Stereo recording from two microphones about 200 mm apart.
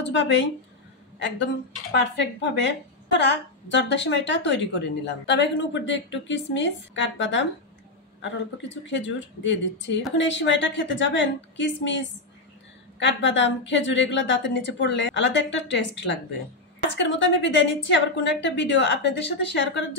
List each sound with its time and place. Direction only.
0.0 s a woman's voice: 60° left (ahead or behind)